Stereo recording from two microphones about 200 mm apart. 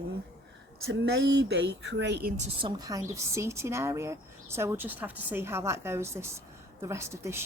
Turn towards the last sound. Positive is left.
turn(degrees=-15)  # may be behind; listen again after turning